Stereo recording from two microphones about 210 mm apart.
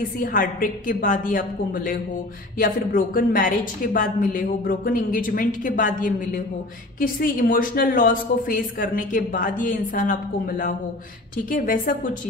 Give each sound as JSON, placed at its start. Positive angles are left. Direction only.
{"t": 0.2, "sound": "a woman's voice", "side_deg": 40}
{"t": 2.6, "sound": "a woman's voice", "side_deg": 40}
{"t": 11.5, "sound": "a woman's voice", "side_deg": 40}